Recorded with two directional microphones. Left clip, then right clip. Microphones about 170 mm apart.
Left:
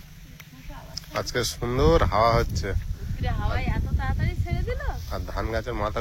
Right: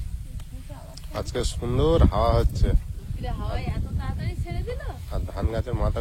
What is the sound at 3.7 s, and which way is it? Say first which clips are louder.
Speech: left 5 dB; 90° right.